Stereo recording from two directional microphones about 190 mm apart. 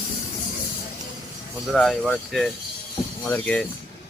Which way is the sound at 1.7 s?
5° left (ahead or behind).